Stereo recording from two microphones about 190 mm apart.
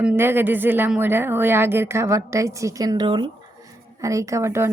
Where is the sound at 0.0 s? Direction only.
10° right (ahead or behind).